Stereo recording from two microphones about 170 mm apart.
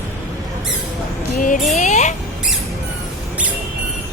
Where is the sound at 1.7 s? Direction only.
45° left (ahead or behind).